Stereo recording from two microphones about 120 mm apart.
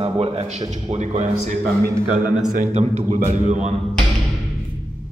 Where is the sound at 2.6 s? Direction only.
70° right (ahead or behind).